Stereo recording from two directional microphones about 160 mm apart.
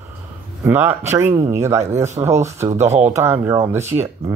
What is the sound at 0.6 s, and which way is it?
Speech, 15° right (ahead or behind).